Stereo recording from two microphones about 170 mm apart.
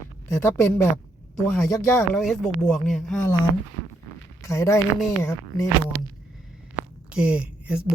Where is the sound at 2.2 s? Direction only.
Centre (ahead or behind).